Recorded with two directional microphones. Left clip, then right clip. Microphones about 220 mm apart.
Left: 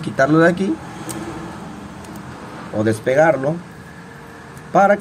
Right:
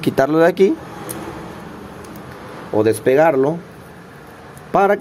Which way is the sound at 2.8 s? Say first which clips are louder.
Right 1 dB; 45° right (ahead or behind).